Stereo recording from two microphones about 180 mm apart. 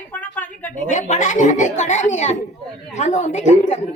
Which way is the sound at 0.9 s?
40° left (ahead or behind).